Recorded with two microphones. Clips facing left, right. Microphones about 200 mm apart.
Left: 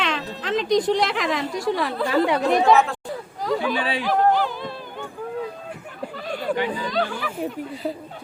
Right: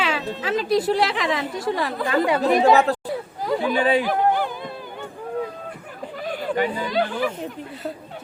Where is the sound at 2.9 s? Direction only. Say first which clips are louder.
Right 8 dB; 40° right (ahead or behind).